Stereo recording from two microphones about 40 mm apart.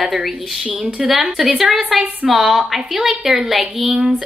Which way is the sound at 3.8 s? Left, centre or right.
Right.